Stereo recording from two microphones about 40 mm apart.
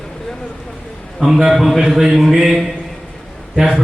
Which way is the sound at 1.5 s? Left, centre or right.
Centre.